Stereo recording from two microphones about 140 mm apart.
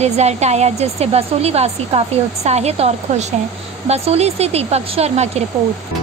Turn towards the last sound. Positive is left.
turn(degrees=-50)  # may be behind; listen again after turning